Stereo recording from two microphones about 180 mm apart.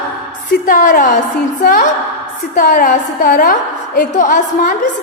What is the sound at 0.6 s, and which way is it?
A woman's voice, 50° left (ahead or behind).